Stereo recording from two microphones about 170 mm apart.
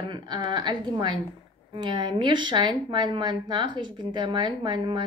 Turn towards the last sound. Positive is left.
turn(degrees=-25)  # may be behind; listen again after turning